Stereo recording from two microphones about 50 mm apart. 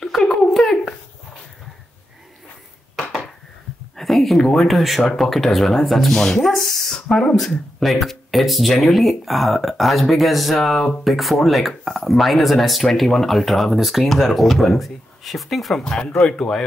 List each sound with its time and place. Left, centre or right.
0.0 s a sound: centre
3.0 s dishes: centre
3.9 s speech: centre
15.8 s speech: centre